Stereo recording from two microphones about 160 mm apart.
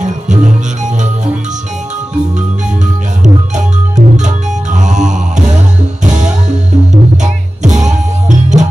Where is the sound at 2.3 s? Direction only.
50° right (ahead or behind).